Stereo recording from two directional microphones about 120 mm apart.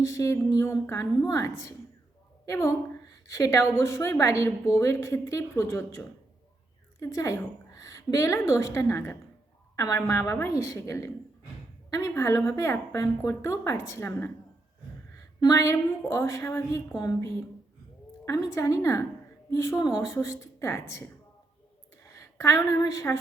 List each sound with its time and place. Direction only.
0.0 s a woman's voice: 25° left (ahead or behind)
7.0 s a woman's voice: 25° left (ahead or behind)
15.4 s a woman's voice: 30° left (ahead or behind)